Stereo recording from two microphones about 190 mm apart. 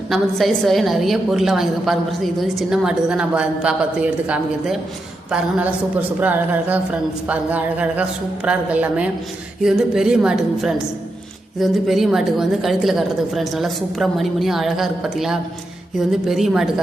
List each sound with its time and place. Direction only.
0.1 s a woman's voice: centre (ahead or behind)
6.1 s a woman's voice: 10° right (ahead or behind)